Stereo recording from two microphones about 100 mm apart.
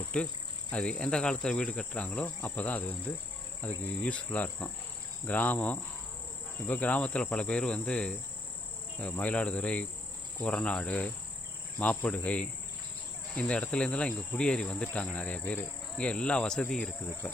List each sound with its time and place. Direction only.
0.1 s insect: 10° left (ahead or behind)